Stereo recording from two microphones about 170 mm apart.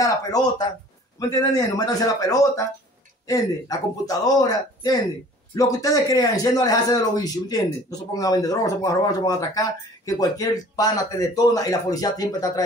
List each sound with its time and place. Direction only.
0.0 s speech: 20° left (ahead or behind)